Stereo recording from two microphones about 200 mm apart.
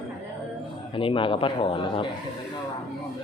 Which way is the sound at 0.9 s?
25° left (ahead or behind).